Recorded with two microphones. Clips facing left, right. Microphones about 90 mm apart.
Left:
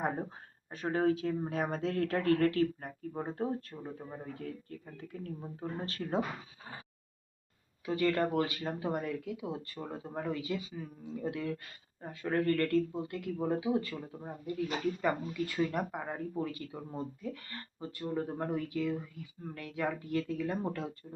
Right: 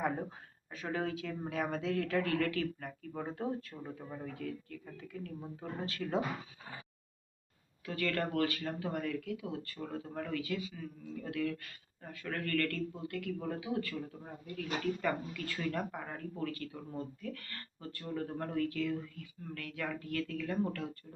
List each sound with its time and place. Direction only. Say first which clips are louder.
0.0 s speech: left 1 dB; 40° left (ahead or behind)
7.9 s speech: left 5 dB; 20° left (ahead or behind)